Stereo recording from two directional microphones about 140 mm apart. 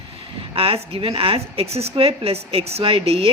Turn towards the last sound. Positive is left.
turn(degrees=-40)  # may be behind; listen again after turning